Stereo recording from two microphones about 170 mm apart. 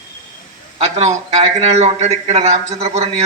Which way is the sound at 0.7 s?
40° right (ahead or behind).